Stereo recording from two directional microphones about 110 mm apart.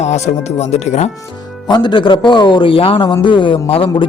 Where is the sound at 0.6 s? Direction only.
80° left.